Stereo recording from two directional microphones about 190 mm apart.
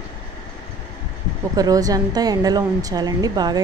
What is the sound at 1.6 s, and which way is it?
A woman's voice, 20° right (ahead or behind).